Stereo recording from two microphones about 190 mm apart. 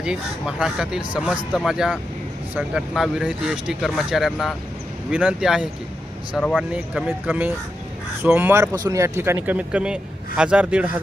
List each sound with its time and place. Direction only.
0.0 s speech: 5° right (ahead or behind)
7.1 s speech: 10° right (ahead or behind)